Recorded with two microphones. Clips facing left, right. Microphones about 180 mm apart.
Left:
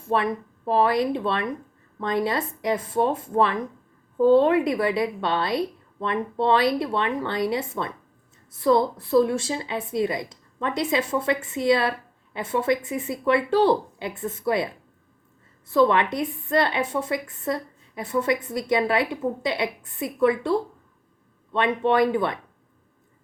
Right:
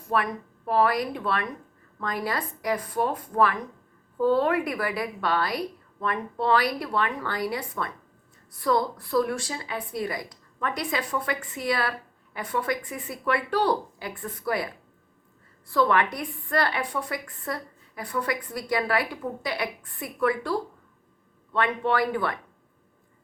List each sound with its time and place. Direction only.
0.0 s a woman's voice: 25° left (ahead or behind)
15.7 s a woman's voice: 20° left (ahead or behind)